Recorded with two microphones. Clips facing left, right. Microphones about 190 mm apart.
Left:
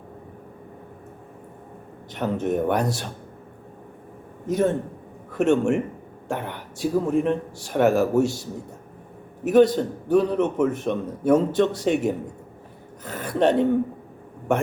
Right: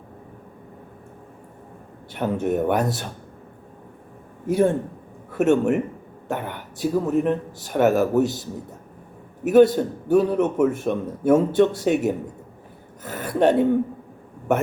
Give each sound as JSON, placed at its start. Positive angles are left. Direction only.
{"t": 2.1, "sound": "a man's voice", "side_deg": -5}
{"t": 4.4, "sound": "a man's voice", "side_deg": -10}